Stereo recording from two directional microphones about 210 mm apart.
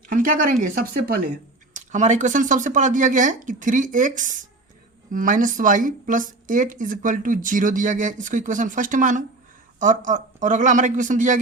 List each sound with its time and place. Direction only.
0.1 s speech: 40° right (ahead or behind)